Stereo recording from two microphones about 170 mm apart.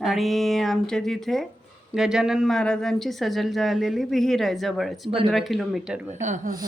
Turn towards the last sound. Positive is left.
turn(degrees=-45)  # may be behind; listen again after turning